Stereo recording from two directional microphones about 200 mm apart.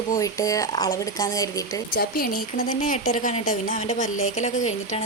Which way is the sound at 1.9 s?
50° left (ahead or behind).